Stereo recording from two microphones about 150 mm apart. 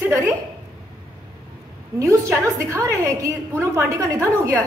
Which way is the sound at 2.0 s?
20° right (ahead or behind).